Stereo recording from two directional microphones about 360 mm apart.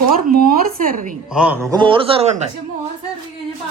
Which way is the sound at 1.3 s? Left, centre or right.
Centre.